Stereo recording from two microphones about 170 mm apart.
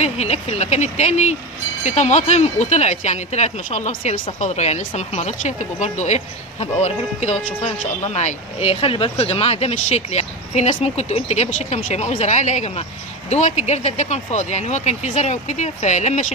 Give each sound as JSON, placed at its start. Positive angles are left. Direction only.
{"t": 0.0, "sound": "speech", "side_deg": 40}